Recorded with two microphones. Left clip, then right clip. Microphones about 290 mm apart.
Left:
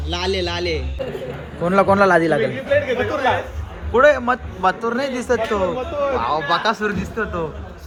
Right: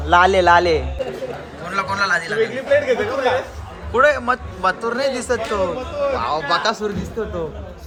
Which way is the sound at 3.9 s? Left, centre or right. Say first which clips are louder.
Left 1 dB; centre.